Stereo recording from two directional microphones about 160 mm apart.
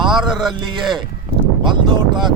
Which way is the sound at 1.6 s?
30° right (ahead or behind).